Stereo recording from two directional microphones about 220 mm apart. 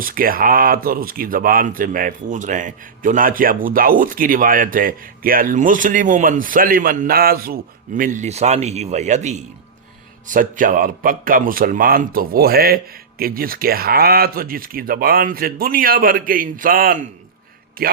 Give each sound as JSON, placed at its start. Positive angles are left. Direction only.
{"t": 0.0, "sound": "a man's voice", "side_deg": -40}